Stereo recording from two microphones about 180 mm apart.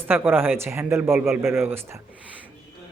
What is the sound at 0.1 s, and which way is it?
Speech, 10° right (ahead or behind).